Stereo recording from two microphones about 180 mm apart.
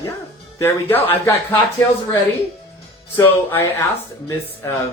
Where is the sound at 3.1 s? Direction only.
15° left (ahead or behind).